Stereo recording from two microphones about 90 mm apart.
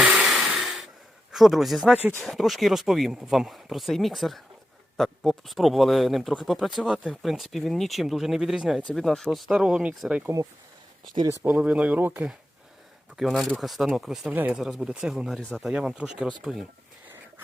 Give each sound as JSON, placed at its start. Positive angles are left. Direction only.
{"t": 0.0, "sound": "a sound", "side_deg": -15}
{"t": 0.3, "sound": "a sound", "side_deg": -5}
{"t": 1.3, "sound": "speech", "side_deg": 0}
{"t": 6.7, "sound": "speech", "side_deg": -10}
{"t": 8.8, "sound": "speech", "side_deg": 10}
{"t": 11.4, "sound": "speech", "side_deg": -15}
{"t": 13.1, "sound": "speech", "side_deg": 0}
{"t": 14.3, "sound": "speech", "side_deg": -15}
{"t": 14.6, "sound": "speech", "side_deg": -5}
{"t": 15.4, "sound": "speech", "side_deg": 15}
{"t": 15.7, "sound": "speech", "side_deg": -10}